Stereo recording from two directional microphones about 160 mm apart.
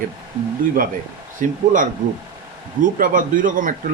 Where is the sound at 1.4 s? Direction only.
55° right (ahead or behind).